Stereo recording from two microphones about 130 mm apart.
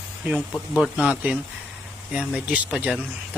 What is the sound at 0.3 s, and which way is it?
Speech, 10° left (ahead or behind).